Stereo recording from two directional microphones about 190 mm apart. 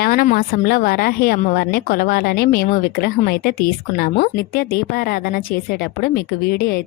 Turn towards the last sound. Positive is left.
turn(degrees=55)  # may be behind; listen again after turning